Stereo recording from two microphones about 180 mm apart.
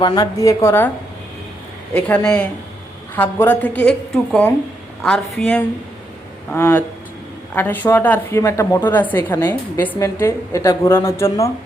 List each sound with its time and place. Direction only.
0.0 s a woman's voice: 25° left (ahead or behind)
1.9 s a woman's voice: 5° left (ahead or behind)